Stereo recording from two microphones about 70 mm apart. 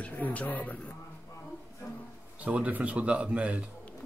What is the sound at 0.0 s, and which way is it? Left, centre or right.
Speech, left.